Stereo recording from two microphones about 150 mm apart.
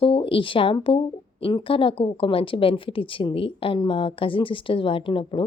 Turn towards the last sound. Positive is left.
turn(degrees=35)  # may be behind; listen again after turning